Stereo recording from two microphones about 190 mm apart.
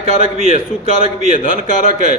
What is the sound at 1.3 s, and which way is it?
Speech, 45° left (ahead or behind).